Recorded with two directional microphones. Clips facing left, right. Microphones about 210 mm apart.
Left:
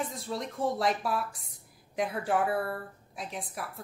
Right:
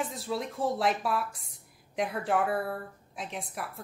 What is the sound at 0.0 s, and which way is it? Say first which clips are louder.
A woman's voice: right 2 dB; centre (ahead or behind).